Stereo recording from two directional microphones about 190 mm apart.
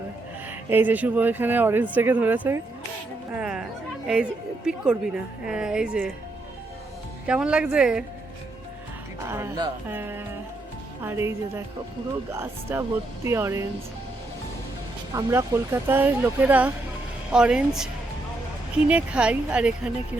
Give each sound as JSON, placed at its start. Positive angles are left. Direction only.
{"t": 0.7, "sound": "a woman's voice", "side_deg": -10}
{"t": 7.3, "sound": "a woman's voice", "side_deg": -5}
{"t": 9.2, "sound": "speech", "side_deg": -15}
{"t": 15.1, "sound": "a woman's voice", "side_deg": -15}
{"t": 18.9, "sound": "a woman's voice", "side_deg": -5}